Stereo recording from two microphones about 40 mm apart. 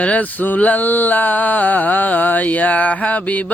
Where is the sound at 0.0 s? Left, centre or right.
Left.